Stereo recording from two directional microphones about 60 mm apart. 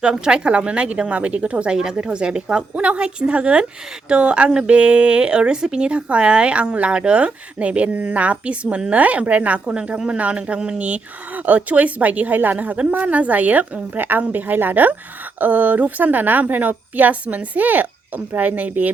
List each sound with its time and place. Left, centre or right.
0.0 s a woman's voice: centre